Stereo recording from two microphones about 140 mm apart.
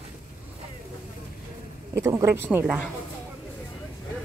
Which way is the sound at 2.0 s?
20° right (ahead or behind).